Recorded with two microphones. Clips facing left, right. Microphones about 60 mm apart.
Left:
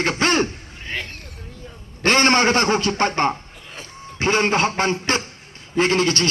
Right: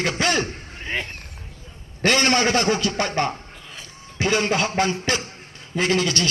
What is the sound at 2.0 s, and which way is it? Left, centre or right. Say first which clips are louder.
A man's voice: left 3 dB; left.